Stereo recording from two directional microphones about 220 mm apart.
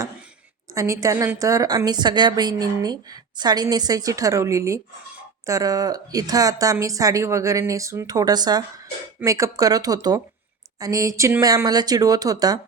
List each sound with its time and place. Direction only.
0.7 s a woman's voice: 15° right (ahead or behind)